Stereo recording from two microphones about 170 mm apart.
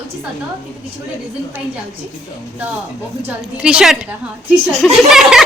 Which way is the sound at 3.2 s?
5° right (ahead or behind).